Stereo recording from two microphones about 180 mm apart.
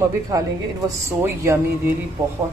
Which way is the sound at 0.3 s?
20° right (ahead or behind).